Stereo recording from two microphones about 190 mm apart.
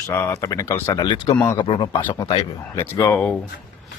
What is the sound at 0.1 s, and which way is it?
Speech, 10° left (ahead or behind).